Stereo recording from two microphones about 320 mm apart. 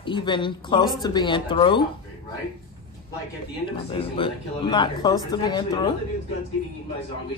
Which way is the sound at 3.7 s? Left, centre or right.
Centre.